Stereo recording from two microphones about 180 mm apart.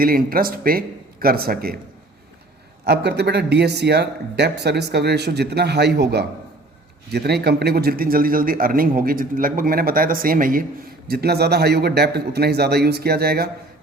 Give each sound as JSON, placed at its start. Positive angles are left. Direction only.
{"t": 0.0, "sound": "a man's voice", "side_deg": -55}
{"t": 2.8, "sound": "a man's voice", "side_deg": -65}
{"t": 11.1, "sound": "a man's voice", "side_deg": -60}